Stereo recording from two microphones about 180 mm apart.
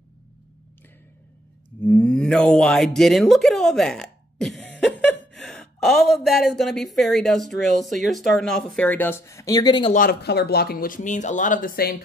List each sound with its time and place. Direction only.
1.8 s speech: 5° left (ahead or behind); by 9.9 s 25° left (ahead or behind)
9.9 s speech: 60° left (ahead or behind)